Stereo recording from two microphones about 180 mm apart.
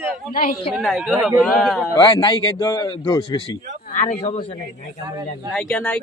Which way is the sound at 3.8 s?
40° left (ahead or behind).